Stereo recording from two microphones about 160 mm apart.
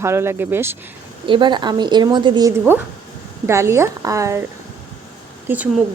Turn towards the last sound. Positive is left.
turn(degrees=-10)  # may be behind; listen again after turning